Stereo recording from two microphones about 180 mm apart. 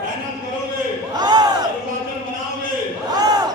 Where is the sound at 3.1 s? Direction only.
20° right (ahead or behind).